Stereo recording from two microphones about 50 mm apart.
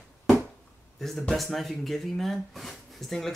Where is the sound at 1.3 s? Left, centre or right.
Centre.